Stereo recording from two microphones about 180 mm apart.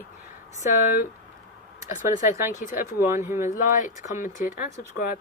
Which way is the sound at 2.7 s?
10° right (ahead or behind).